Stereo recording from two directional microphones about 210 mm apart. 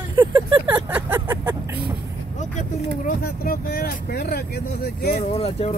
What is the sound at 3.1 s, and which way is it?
Speech, 45° left (ahead or behind).